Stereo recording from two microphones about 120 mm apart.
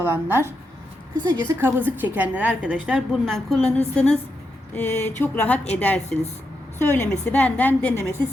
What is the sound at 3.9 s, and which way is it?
Speech, 10° left (ahead or behind).